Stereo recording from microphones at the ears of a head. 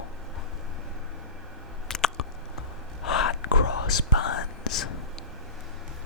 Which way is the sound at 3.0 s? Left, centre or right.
Left.